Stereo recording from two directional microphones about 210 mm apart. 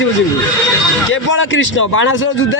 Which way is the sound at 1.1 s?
65° left (ahead or behind).